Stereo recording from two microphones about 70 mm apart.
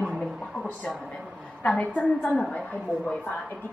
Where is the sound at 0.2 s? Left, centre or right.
Centre.